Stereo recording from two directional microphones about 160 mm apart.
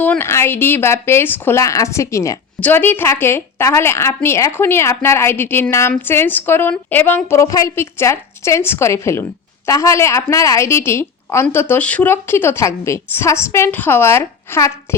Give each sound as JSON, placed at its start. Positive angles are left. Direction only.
{"t": 0.0, "sound": "a woman's voice", "side_deg": 15}